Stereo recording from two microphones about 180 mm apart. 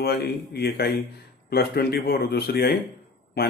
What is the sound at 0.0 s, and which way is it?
A man's voice, 60° left (ahead or behind).